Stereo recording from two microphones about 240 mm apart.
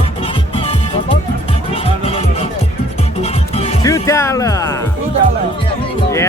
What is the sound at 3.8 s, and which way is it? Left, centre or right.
Music, centre.